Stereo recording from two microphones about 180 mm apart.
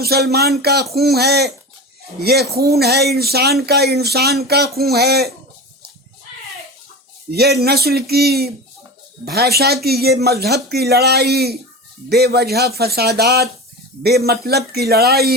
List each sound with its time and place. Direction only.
0.0 s speech: 60° right (ahead or behind)
7.3 s speech: 65° right (ahead or behind)